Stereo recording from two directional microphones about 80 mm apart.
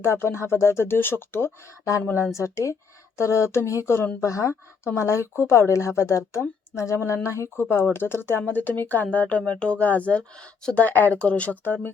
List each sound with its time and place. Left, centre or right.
0.0 s speech: left